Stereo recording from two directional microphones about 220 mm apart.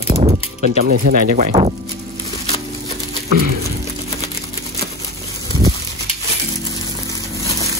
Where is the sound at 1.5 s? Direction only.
30° right (ahead or behind).